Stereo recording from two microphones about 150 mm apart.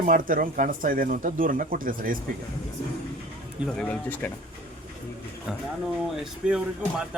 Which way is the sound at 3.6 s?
5° left (ahead or behind).